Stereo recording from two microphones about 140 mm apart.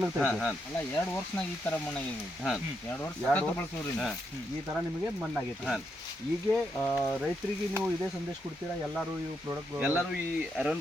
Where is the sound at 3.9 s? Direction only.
5° left (ahead or behind).